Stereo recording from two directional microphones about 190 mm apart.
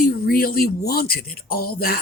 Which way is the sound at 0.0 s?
50° left (ahead or behind).